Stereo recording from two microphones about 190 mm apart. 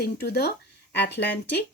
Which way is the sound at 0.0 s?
55° left (ahead or behind).